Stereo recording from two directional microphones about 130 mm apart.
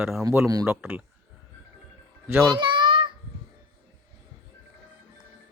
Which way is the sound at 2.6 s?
40° right (ahead or behind).